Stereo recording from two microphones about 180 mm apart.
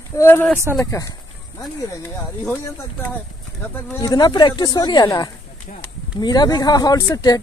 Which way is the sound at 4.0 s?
20° left (ahead or behind).